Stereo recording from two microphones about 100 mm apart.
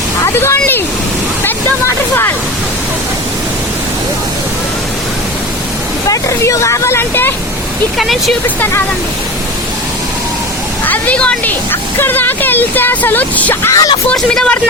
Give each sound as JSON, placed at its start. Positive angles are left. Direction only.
{"t": 0.3, "sound": "a sound", "side_deg": 25}
{"t": 6.1, "sound": "speech", "side_deg": 30}
{"t": 7.9, "sound": "speech", "side_deg": 0}
{"t": 10.8, "sound": "speech", "side_deg": 15}
{"t": 13.7, "sound": "speech", "side_deg": 35}
{"t": 14.1, "sound": "speech", "side_deg": 10}